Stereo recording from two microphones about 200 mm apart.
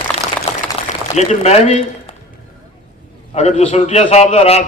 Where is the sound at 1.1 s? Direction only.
35° left (ahead or behind).